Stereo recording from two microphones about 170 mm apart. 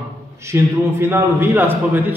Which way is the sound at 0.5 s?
15° right (ahead or behind).